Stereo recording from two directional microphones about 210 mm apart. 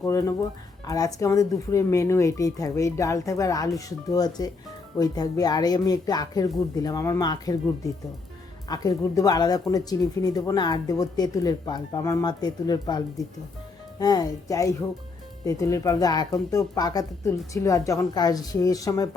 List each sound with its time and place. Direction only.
0.0 s a woman's voice: 15° left (ahead or behind)
8.7 s speech: 20° left (ahead or behind)
14.0 s a woman's voice: 20° left (ahead or behind)